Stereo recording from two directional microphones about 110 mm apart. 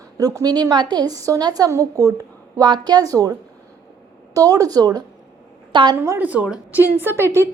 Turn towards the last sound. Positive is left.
turn(degrees=-25)  # may be behind; listen again after turning